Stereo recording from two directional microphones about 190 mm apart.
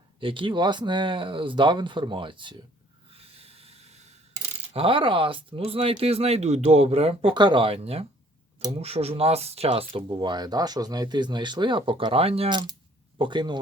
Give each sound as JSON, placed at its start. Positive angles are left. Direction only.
{"t": 0.2, "sound": "speech", "side_deg": -25}
{"t": 3.1, "sound": "snort", "side_deg": -30}
{"t": 4.7, "sound": "speech", "side_deg": -30}